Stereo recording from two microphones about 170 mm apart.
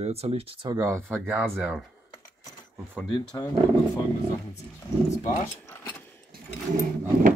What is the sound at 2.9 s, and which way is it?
Speech, centre (ahead or behind).